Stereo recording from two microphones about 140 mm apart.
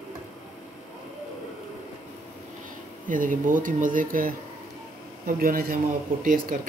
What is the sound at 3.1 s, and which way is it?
Speech, 75° right (ahead or behind).